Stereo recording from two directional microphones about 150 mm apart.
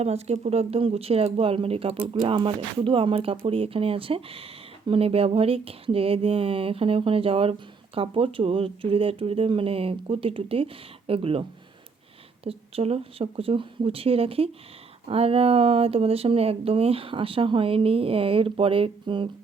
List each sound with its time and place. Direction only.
0.0 s speech: 45° right (ahead or behind)
12.5 s speech: 40° right (ahead or behind)